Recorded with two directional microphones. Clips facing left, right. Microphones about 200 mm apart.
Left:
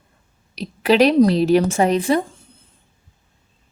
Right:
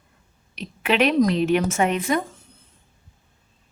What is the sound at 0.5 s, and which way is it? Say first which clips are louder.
A woman's voice: left 6 dB; 35° left (ahead or behind).